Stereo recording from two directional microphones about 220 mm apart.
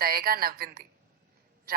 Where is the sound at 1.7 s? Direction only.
40° right (ahead or behind).